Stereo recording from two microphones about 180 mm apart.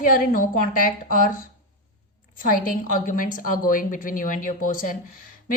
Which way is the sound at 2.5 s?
50° left (ahead or behind).